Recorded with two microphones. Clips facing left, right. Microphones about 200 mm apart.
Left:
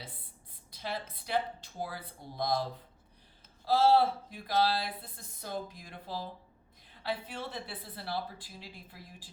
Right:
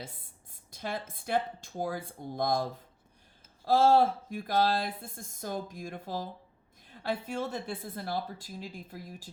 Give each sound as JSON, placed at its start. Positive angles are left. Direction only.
{"t": 0.7, "sound": "speech", "side_deg": -50}
{"t": 3.7, "sound": "speech", "side_deg": -50}